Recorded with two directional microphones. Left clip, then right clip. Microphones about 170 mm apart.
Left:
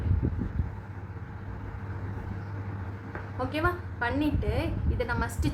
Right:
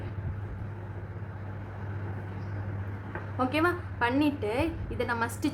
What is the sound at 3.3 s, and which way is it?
A woman's voice, 35° right (ahead or behind).